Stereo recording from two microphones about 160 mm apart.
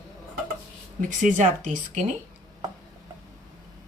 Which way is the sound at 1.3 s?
50° right (ahead or behind).